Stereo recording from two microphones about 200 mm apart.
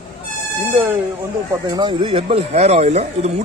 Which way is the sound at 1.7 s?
20° right (ahead or behind).